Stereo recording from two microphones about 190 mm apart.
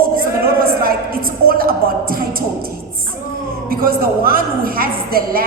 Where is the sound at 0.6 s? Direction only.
50° right (ahead or behind).